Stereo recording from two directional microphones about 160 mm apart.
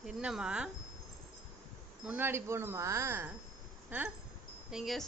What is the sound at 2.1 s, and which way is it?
Speech, 15° right (ahead or behind).